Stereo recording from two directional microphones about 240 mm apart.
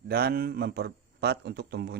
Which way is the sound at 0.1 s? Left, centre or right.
Right.